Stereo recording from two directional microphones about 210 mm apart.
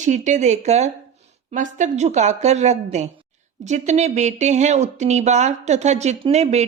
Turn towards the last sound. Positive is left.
turn(degrees=-30)  # may be behind; listen again after turning